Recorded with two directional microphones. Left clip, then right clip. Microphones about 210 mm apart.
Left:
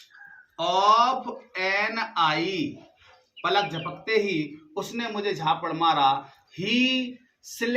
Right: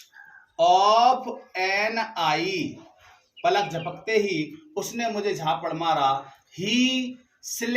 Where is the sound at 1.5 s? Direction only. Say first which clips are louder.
Right 1 dB; 10° left (ahead or behind).